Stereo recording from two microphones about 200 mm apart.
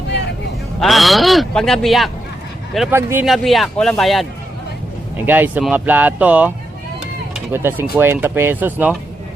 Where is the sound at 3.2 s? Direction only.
Centre (ahead or behind).